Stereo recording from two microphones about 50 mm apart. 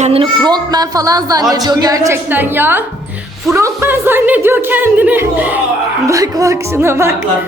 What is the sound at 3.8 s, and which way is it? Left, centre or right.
Speech, right.